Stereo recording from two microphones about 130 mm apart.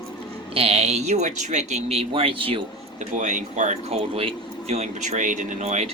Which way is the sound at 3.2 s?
70° right (ahead or behind).